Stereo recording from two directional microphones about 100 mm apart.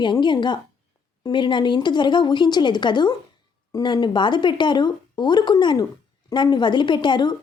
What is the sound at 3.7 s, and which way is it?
A woman's voice, 40° left (ahead or behind).